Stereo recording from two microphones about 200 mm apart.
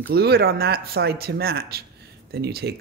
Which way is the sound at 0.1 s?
50° right (ahead or behind).